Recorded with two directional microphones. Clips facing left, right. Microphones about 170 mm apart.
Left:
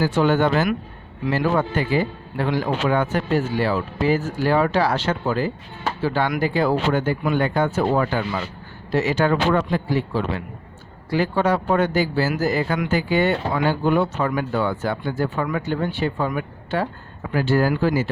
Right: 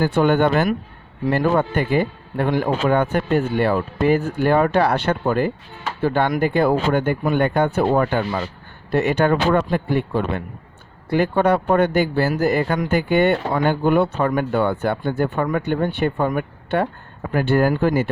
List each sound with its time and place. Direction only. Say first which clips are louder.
0.0 s a man's voice: right 2 dB; 55° right (ahead or behind)